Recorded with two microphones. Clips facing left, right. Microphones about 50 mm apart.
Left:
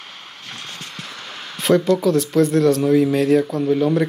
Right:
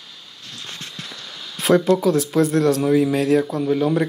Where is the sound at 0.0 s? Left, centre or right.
Left.